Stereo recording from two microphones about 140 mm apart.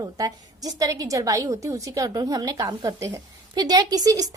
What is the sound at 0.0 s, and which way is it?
A woman's voice, 25° right (ahead or behind).